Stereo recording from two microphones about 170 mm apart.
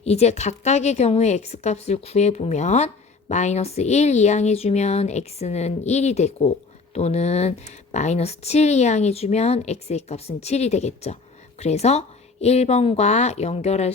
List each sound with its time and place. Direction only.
0.0 s a woman's voice: 40° left (ahead or behind)